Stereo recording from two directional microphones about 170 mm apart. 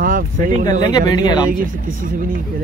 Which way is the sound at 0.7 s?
25° left (ahead or behind).